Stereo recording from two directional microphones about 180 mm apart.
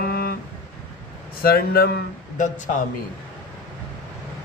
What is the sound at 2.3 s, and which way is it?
Speech, 45° left (ahead or behind).